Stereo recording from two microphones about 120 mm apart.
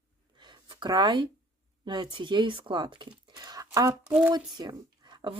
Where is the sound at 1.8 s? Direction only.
40° right (ahead or behind).